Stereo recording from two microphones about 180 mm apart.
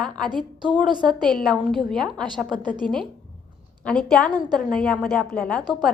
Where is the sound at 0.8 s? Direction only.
25° right (ahead or behind).